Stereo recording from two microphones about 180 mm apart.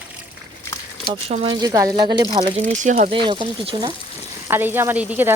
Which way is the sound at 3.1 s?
25° right (ahead or behind).